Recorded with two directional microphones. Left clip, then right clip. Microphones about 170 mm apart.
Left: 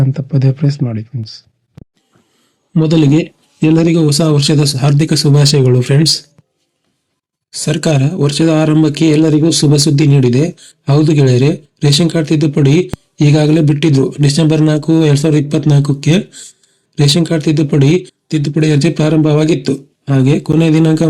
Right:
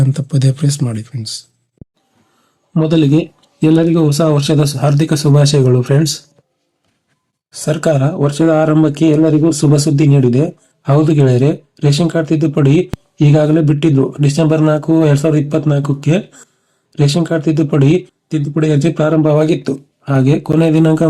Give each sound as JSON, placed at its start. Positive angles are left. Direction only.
{"t": 0.0, "sound": "speech", "side_deg": 0}
{"t": 2.7, "sound": "speech", "side_deg": 25}
{"t": 7.5, "sound": "speech", "side_deg": 30}